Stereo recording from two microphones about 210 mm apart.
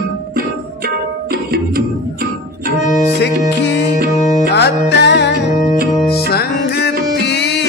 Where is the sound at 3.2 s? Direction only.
55° left (ahead or behind).